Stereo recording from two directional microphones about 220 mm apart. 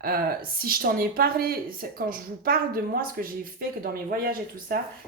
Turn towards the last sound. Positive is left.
turn(degrees=-40)  # may be behind; listen again after turning